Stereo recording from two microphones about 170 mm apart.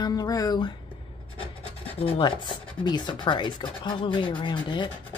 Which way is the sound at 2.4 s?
25° left (ahead or behind).